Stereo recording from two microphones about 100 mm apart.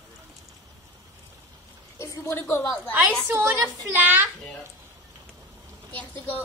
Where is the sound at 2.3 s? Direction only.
20° left (ahead or behind).